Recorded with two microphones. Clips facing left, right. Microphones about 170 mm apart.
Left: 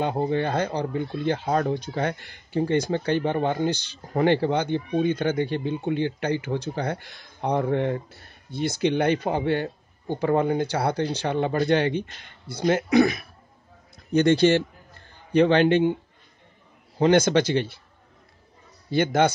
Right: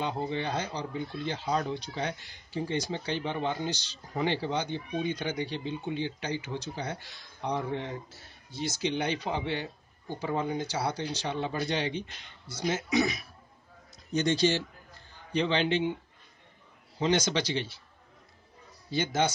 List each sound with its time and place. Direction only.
0.0 s a man's voice: 50° left (ahead or behind)
17.0 s speech: 55° left (ahead or behind)
18.9 s speech: 55° left (ahead or behind)